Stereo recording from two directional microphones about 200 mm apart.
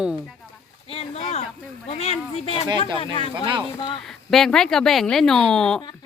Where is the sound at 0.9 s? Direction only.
30° left (ahead or behind).